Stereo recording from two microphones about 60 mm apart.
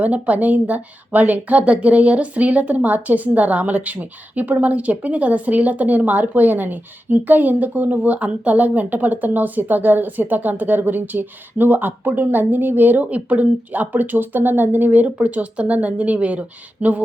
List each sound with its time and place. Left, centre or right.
0.0 s a woman's voice: right